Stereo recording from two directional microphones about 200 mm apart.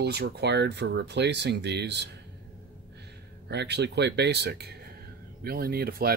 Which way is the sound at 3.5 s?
60° right (ahead or behind).